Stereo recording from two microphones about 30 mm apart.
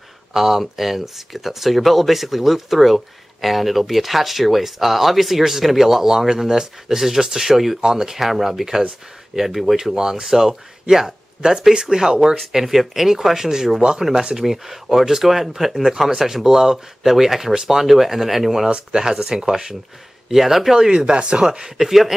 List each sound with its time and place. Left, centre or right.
0.3 s speech: centre
7.8 s speech: centre
9.9 s speech: right
10.2 s speech: centre
12.5 s speech: centre
18.7 s speech: right; by 20.7 s centre
20.7 s speech: centre
21.0 s speech: right
21.7 s speech: centre